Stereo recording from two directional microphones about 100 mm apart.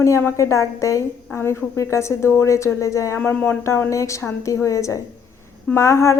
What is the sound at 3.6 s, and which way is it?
A woman's voice, 30° left (ahead or behind).